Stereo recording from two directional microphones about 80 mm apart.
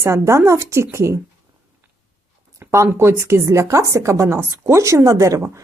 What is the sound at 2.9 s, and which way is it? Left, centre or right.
A woman's voice, right.